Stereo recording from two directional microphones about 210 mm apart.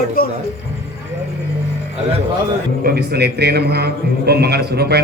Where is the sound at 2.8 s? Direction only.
50° right (ahead or behind).